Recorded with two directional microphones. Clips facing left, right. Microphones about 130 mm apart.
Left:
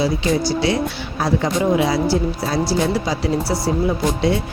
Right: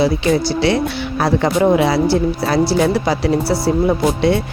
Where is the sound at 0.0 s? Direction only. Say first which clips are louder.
Right 3 dB; 65° right (ahead or behind).